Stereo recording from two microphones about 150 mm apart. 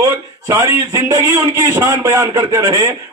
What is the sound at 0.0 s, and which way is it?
A man's voice, 20° right (ahead or behind).